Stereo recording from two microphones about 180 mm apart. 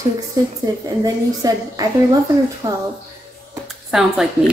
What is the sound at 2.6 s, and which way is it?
Speech, 35° right (ahead or behind).